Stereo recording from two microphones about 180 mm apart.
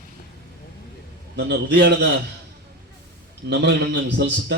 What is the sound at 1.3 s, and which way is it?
Speech, 75° right (ahead or behind).